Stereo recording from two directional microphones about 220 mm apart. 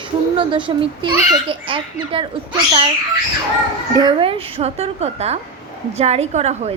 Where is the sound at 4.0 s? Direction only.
20° right (ahead or behind).